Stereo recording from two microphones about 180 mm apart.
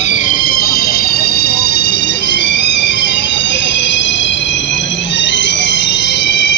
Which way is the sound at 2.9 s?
80° left.